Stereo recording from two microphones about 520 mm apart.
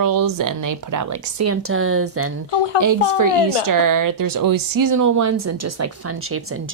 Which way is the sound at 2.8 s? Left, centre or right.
Right.